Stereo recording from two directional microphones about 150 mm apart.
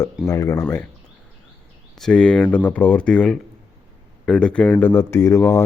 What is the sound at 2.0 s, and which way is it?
Speech, 5° left (ahead or behind).